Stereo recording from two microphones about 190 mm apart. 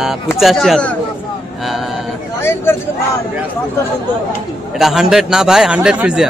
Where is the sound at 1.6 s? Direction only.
Centre (ahead or behind).